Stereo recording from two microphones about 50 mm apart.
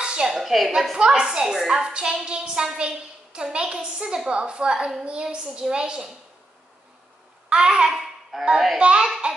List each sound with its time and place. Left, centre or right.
0.0 s a woman's voice: centre
0.9 s a woman's voice: centre
7.4 s a woman's voice: centre
8.0 s babbling: centre
8.7 s a woman's voice: centre